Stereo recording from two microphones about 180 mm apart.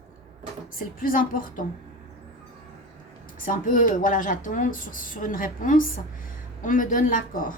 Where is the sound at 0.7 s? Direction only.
50° left (ahead or behind).